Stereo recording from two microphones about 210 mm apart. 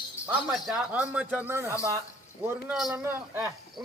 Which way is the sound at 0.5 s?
5° right (ahead or behind).